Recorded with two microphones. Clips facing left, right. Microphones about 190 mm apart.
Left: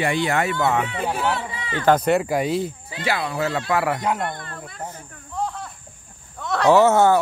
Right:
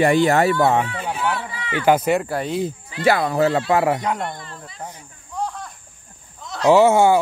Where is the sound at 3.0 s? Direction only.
50° right (ahead or behind).